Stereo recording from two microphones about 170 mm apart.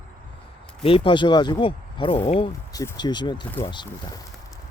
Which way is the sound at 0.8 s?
35° left (ahead or behind).